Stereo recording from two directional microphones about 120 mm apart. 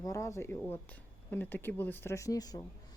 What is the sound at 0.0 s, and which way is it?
Speech, 25° left (ahead or behind).